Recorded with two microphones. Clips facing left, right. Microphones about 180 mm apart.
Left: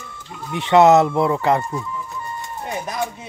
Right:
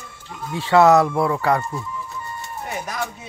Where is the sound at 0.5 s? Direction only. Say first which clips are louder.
Left 2 dB; 20° left (ahead or behind).